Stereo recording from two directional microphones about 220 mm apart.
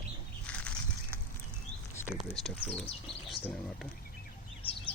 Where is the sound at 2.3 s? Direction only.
5° left (ahead or behind).